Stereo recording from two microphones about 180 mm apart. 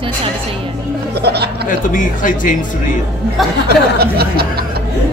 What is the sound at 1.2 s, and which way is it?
Speech, 65° right (ahead or behind).